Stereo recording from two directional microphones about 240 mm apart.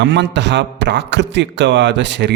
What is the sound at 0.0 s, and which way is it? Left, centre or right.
A man's voice, right.